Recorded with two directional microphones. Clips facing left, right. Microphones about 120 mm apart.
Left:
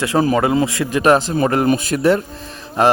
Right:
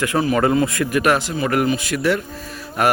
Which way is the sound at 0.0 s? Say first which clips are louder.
Left 2 dB; 30° left (ahead or behind).